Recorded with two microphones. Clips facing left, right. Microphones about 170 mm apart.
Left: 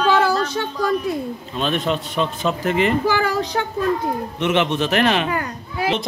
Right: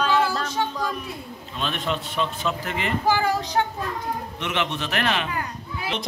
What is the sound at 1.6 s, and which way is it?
A man's voice, 40° left (ahead or behind).